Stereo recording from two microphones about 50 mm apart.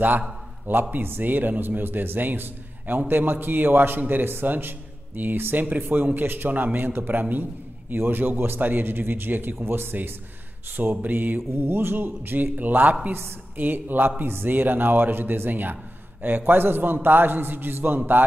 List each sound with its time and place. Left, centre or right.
0.7 s a man's voice: right